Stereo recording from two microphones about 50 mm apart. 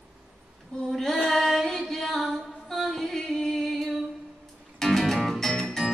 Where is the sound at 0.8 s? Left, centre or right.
Centre.